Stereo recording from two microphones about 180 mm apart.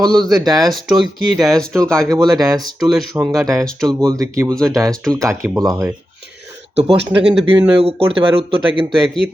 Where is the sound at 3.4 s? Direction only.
15° right (ahead or behind).